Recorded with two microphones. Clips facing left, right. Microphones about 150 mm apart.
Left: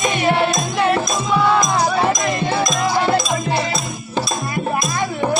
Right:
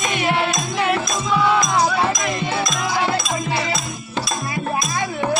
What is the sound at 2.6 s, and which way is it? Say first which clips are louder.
Music: left 4 dB; 35° left (ahead or behind).